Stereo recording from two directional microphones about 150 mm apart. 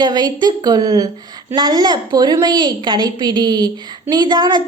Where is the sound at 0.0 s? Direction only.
30° right (ahead or behind).